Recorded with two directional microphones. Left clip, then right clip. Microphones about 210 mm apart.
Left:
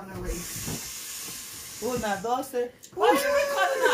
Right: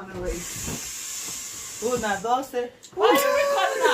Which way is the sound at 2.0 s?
5° left (ahead or behind).